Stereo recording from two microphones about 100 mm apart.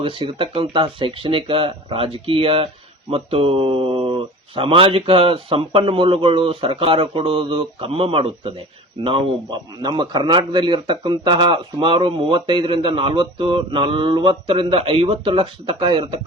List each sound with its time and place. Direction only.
0.0 s a man's voice: 60° right (ahead or behind)
15.1 s a man's voice: 55° right (ahead or behind)